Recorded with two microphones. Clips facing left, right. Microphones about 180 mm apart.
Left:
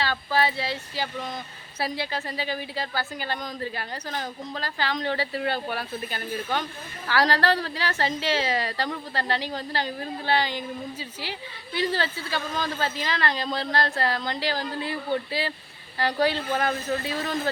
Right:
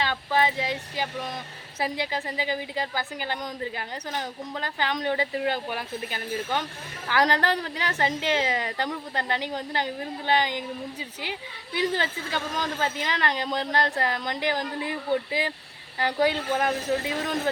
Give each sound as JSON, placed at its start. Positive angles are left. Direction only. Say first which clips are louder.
{"t": 0.0, "sound": "a woman's voice", "louder": "even", "side_deg": -15}